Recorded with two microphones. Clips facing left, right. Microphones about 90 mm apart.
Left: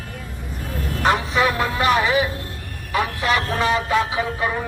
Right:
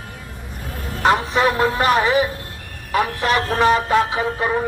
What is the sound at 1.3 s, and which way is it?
Speech, 40° right (ahead or behind).